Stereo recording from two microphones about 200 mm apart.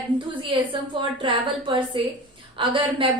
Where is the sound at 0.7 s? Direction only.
25° right (ahead or behind).